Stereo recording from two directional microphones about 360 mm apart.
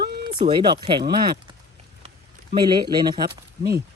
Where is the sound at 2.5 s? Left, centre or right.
Centre.